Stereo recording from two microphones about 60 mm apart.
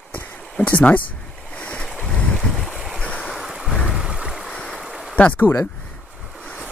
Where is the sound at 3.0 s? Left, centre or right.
Left.